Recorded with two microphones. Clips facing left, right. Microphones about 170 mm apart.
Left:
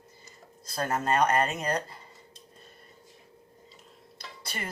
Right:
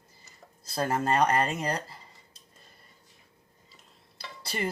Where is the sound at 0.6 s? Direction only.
30° right (ahead or behind).